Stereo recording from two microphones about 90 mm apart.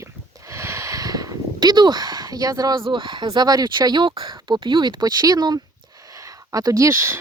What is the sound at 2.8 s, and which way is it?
Speech, 65° right (ahead or behind).